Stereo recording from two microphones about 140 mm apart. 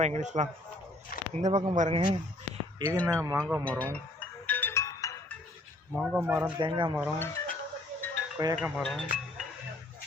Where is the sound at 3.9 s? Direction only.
10° left (ahead or behind).